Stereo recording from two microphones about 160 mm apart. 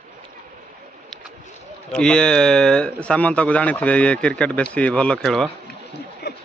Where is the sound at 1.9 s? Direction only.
5° left (ahead or behind).